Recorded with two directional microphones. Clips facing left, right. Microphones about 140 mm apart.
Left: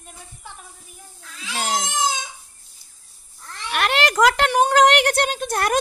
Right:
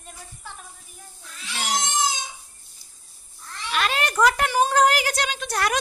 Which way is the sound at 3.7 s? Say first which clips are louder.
Left 4 dB; 70° left (ahead or behind).